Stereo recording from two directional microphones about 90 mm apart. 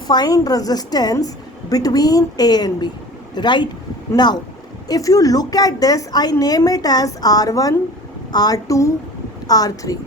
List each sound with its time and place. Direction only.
0.1 s a woman's voice: 45° left (ahead or behind)
4.9 s a woman's voice: 40° left (ahead or behind)